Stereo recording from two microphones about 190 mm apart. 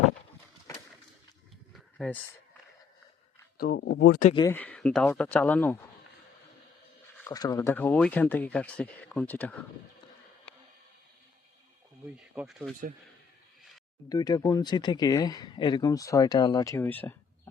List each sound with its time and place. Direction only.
1.7 s a sound: centre (ahead or behind)
3.6 s speech: 65° left (ahead or behind)
4.5 s speech: 10° left (ahead or behind)
7.3 s speech: 20° left (ahead or behind)
12.1 s speech: 5° right (ahead or behind)
14.1 s speech: 20° left (ahead or behind)